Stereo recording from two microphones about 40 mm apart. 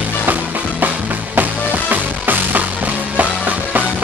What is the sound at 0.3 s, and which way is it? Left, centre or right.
Music, right.